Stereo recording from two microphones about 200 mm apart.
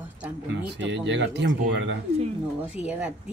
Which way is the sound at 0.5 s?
65° right (ahead or behind).